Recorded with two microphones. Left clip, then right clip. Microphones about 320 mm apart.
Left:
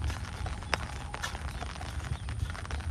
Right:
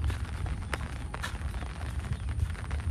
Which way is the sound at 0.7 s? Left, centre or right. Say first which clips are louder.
Left 4 dB; left.